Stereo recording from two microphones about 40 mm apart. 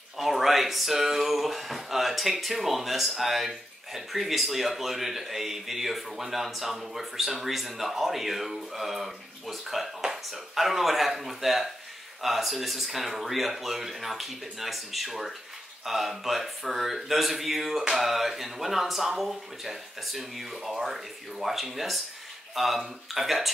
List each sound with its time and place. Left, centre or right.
0.2 s speech: centre